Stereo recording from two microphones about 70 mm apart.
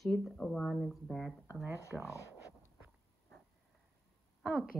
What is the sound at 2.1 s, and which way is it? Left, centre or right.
Speech, left.